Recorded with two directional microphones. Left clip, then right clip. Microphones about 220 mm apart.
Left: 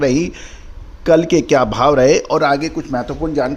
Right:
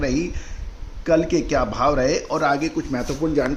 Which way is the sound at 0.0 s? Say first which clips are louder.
Left 8 dB; 45° left (ahead or behind).